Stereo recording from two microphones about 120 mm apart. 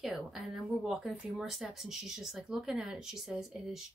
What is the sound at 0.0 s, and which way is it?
Speech, 5° right (ahead or behind).